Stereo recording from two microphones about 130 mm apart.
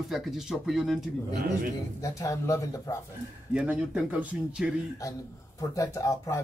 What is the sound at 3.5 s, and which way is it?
Speech, 10° right (ahead or behind).